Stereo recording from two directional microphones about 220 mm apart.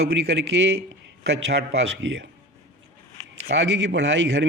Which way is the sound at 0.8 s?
50° right (ahead or behind).